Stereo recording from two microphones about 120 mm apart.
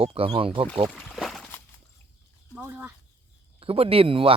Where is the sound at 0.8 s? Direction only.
Centre (ahead or behind).